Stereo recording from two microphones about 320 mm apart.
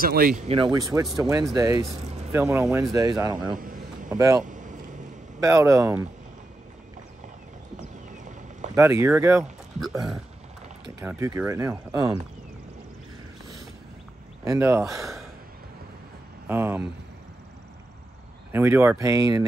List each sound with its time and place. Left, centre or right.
0.0 s speech: right; by 3.5 s centre
3.5 s a sound: right
4.1 s speech: centre
4.5 s vehicle: right
5.4 s speech: centre
8.1 s a sound: right
8.7 s speech: centre
14.4 s speech: centre
16.4 s speech: centre
18.5 s speech: centre